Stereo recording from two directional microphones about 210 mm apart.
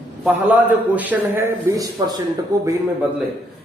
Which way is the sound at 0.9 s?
10° right (ahead or behind).